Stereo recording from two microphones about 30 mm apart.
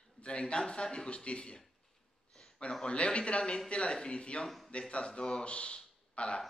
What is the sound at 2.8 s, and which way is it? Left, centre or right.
Speech, left.